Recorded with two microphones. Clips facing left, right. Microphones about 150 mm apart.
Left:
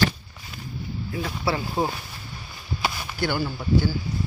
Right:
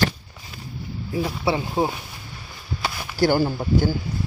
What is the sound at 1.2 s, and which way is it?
Speech, 20° right (ahead or behind).